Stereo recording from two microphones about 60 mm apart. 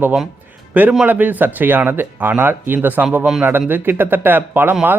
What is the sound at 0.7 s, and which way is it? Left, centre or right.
A man's voice, right.